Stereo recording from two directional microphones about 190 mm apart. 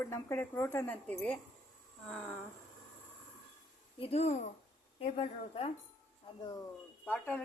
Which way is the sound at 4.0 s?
35° left (ahead or behind).